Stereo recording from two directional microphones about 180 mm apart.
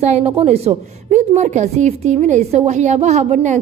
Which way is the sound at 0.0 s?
35° right (ahead or behind).